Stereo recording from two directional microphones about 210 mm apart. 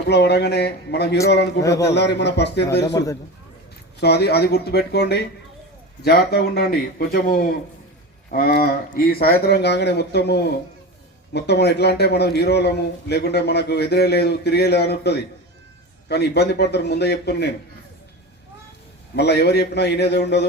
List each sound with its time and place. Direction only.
0.1 s a man's voice: 50° left (ahead or behind)
1.6 s a man's voice: 15° left (ahead or behind)
1.9 s a man's voice: 55° left (ahead or behind)
4.0 s a man's voice: 50° left (ahead or behind)
19.1 s a man's voice: 50° left (ahead or behind)